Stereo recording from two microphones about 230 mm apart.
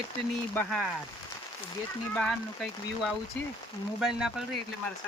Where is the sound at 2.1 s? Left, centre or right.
Centre.